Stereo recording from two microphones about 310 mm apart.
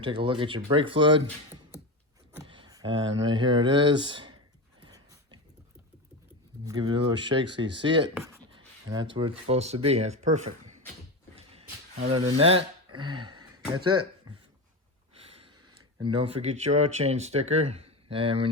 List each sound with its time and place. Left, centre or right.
0.0 s speech: centre
2.5 s speech: centre
4.8 s a sound: centre
6.7 s speech: centre
12.1 s speech: centre
15.6 s a sound: right
16.1 s speech: centre